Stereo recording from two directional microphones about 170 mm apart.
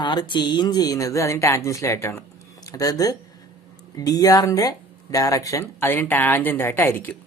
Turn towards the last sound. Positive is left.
turn(degrees=10)  # may be behind; listen again after turning